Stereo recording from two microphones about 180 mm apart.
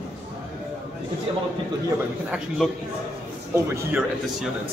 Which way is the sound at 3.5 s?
15° right (ahead or behind).